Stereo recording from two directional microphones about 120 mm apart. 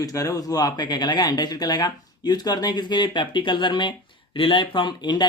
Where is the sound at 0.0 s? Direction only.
30° left (ahead or behind).